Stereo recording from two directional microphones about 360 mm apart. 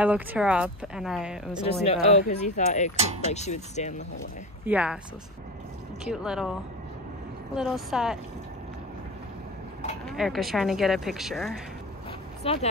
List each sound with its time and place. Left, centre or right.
0.0 s speech: centre
1.6 s speech: centre
3.0 s speech: centre
3.3 s speech: centre
4.6 s speech: centre
6.0 s speech: centre
7.5 s speech: centre
10.0 s speech: centre
12.4 s speech: centre